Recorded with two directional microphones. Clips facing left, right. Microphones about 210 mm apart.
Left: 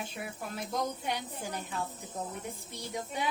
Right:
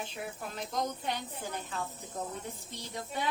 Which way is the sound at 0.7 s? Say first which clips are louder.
Left 1 dB; 10° left (ahead or behind).